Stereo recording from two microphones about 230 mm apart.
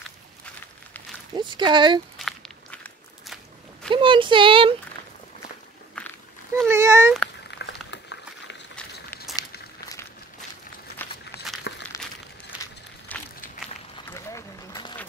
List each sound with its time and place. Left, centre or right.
1.3 s speech: centre
2.1 s walk: centre
3.9 s speech: right
6.7 s speech: centre
7.5 s a sound: left
8.7 s walk: centre
9.3 s walk: centre
11.7 s crumpling: left
13.1 s walk: centre
14.1 s a sound: centre